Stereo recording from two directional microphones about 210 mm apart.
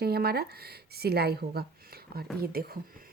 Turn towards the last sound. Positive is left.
turn(degrees=-45)  # may be behind; listen again after turning